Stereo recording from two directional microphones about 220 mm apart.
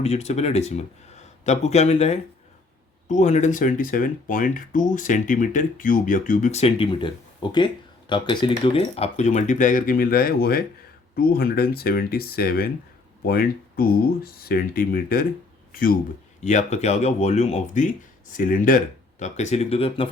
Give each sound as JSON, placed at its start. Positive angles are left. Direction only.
{"t": 0.0, "sound": "speech", "side_deg": 30}